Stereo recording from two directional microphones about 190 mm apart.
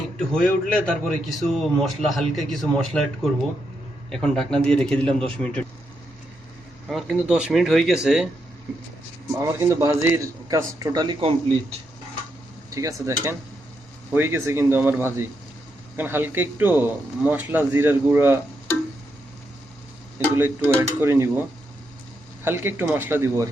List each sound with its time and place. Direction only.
0.2 s a man's voice: 5° left (ahead or behind)
4.1 s a man's voice: 5° left (ahead or behind)
6.8 s a man's voice: centre (ahead or behind)
9.4 s a man's voice: 15° right (ahead or behind)
12.7 s a man's voice: 15° right (ahead or behind)
20.1 s a man's voice: 10° right (ahead or behind)
22.4 s a man's voice: 10° right (ahead or behind)